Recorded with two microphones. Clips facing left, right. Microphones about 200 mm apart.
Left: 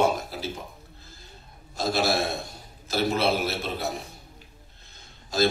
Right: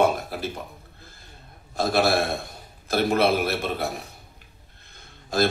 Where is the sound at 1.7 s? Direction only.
55° right (ahead or behind).